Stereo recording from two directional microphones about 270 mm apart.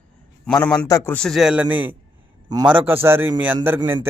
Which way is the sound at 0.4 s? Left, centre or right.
Centre.